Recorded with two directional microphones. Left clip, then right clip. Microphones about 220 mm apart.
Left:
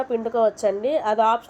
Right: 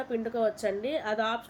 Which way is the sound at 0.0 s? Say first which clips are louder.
Left 8 dB; 10° left (ahead or behind).